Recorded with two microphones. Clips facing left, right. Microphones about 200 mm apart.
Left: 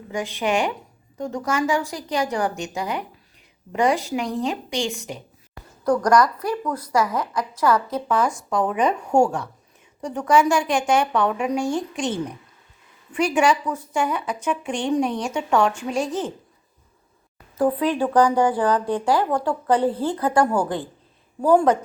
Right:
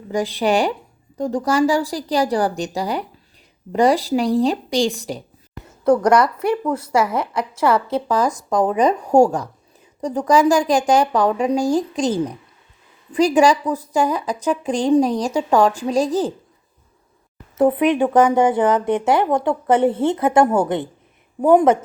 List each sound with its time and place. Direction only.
0.1 s a woman's voice: 35° right (ahead or behind)
5.8 s a woman's voice: 25° right (ahead or behind)
17.6 s a woman's voice: 20° right (ahead or behind)